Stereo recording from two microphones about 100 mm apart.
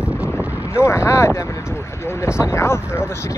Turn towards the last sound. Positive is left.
turn(degrees=25)  # may be behind; listen again after turning